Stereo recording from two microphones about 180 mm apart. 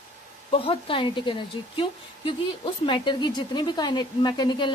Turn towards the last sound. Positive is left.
turn(degrees=25)  # may be behind; listen again after turning